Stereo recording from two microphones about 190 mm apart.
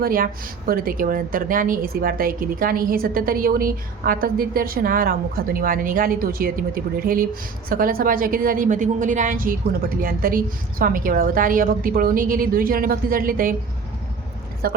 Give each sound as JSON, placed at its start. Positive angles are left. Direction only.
{"t": 0.0, "sound": "a woman's voice", "side_deg": -50}
{"t": 14.6, "sound": "a woman's voice", "side_deg": -50}